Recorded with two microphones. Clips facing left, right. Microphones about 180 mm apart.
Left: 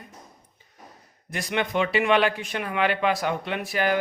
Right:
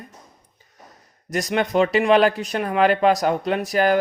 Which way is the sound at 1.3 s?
40° right (ahead or behind).